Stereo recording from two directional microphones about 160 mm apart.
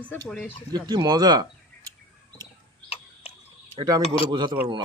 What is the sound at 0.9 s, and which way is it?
Speech, 25° right (ahead or behind).